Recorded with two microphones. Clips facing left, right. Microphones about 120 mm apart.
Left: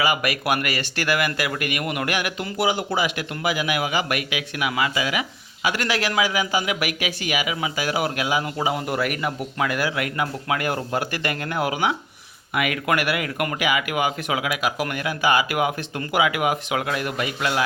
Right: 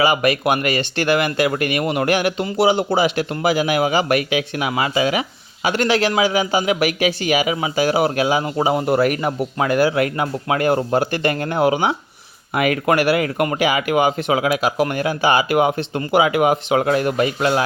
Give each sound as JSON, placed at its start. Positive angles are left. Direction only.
{"t": 0.0, "sound": "a man's voice", "side_deg": -30}